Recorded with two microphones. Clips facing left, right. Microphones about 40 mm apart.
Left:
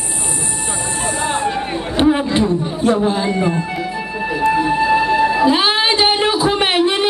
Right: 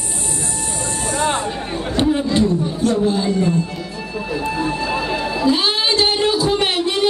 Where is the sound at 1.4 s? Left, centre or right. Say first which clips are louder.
Left 4 dB; left.